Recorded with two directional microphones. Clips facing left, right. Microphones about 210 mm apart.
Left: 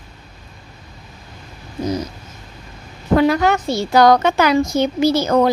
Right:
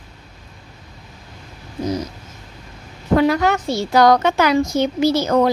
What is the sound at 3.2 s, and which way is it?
A woman's voice, 20° left (ahead or behind).